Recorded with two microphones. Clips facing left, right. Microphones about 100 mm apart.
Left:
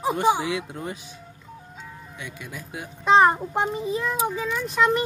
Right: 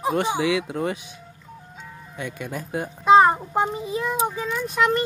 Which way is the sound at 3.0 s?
10° right (ahead or behind).